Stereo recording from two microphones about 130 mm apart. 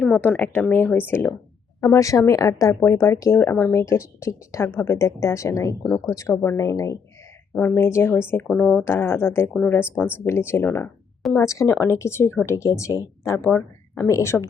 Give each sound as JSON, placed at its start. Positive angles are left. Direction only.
{"t": 0.0, "sound": "speech", "side_deg": 10}
{"t": 13.5, "sound": "speech", "side_deg": 10}
{"t": 14.1, "sound": "speech", "side_deg": 20}